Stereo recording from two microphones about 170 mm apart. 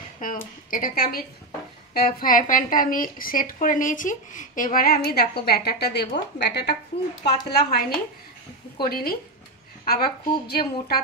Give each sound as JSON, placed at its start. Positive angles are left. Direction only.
{"t": 0.2, "sound": "a woman's voice", "side_deg": 55}
{"t": 8.8, "sound": "a woman's voice", "side_deg": 60}